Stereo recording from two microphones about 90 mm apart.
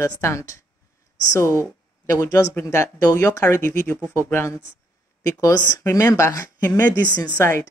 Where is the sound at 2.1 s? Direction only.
35° left (ahead or behind).